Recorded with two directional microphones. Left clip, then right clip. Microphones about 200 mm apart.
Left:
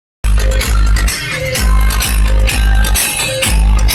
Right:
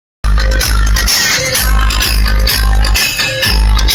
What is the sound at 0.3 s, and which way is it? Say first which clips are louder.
Music: right 3 dB; 20° right (ahead or behind).